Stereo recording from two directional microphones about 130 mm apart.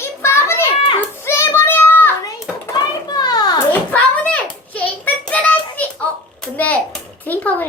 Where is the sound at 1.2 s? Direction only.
20° left (ahead or behind).